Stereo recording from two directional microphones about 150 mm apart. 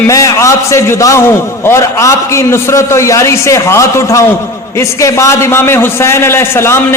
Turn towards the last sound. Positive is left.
turn(degrees=15)  # may be behind; listen again after turning